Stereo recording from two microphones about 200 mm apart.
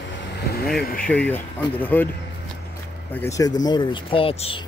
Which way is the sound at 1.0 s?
5° left (ahead or behind).